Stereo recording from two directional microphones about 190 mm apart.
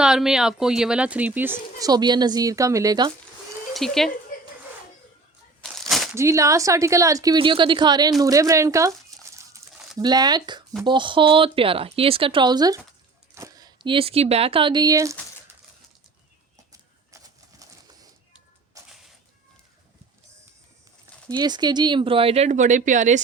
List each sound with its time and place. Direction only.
0.0 s speech: 5° right (ahead or behind)
1.8 s speech: 20° right (ahead or behind)
3.8 s speech: centre (ahead or behind)
6.1 s a woman's voice: 15° right (ahead or behind)
9.3 s a sound: 15° right (ahead or behind)
10.0 s speech: 20° right (ahead or behind)
18.8 s a sound: 15° right (ahead or behind)
21.2 s speech: 20° right (ahead or behind); by 23.2 s 40° right (ahead or behind)